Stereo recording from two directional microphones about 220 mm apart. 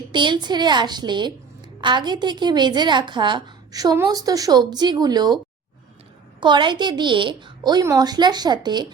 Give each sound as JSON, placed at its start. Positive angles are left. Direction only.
{"t": 0.1, "sound": "a woman's voice", "side_deg": -20}
{"t": 6.4, "sound": "a woman's voice", "side_deg": -20}